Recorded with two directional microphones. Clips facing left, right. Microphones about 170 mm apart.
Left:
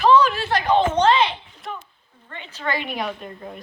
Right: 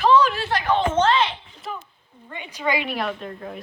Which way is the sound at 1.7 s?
Centre (ahead or behind).